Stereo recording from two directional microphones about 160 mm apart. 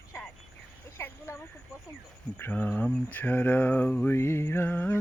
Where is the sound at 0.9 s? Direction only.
15° left (ahead or behind).